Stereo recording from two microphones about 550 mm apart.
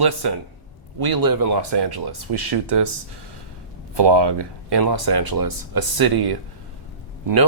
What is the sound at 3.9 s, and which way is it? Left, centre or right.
Speech, right.